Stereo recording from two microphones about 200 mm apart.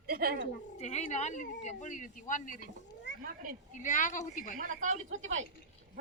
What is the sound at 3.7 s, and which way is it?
Speech, 40° left (ahead or behind).